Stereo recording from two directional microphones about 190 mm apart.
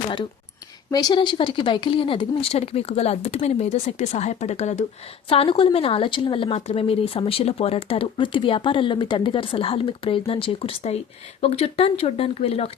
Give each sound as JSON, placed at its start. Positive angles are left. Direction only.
{"t": 0.9, "sound": "speech", "side_deg": 20}